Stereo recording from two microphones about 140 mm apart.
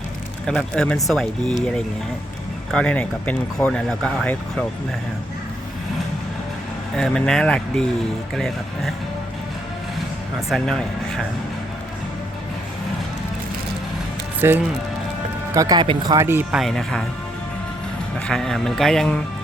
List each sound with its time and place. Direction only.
0.4 s speech: 5° left (ahead or behind)
6.9 s speech: 5° left (ahead or behind)
10.5 s speech: 5° left (ahead or behind)
14.4 s speech: 20° right (ahead or behind)
16.2 s speech: 15° right (ahead or behind); by 17.0 s 5° left (ahead or behind)
18.3 s speech: 5° left (ahead or behind)